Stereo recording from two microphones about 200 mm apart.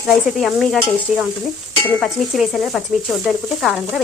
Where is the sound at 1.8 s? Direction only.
Centre (ahead or behind).